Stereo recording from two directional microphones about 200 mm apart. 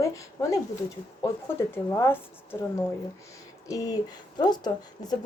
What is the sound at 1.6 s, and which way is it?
Speech, 15° left (ahead or behind).